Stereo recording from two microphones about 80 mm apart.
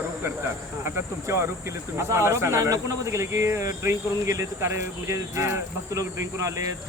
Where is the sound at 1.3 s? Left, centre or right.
Right.